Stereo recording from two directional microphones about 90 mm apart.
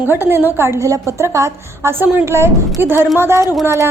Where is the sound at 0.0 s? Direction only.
25° right (ahead or behind).